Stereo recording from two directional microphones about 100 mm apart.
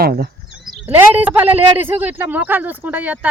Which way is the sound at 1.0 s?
15° right (ahead or behind).